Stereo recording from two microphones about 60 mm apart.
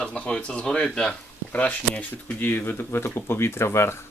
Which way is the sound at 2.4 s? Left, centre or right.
Left.